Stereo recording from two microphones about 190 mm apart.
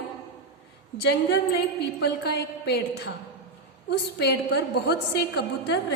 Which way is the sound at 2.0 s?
60° left (ahead or behind).